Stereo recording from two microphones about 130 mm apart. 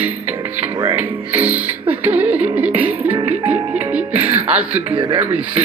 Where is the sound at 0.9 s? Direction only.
15° right (ahead or behind).